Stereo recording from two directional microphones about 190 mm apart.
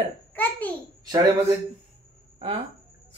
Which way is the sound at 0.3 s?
10° left (ahead or behind).